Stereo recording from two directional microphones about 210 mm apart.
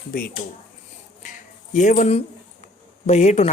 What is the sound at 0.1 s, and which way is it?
Speech, 45° left (ahead or behind).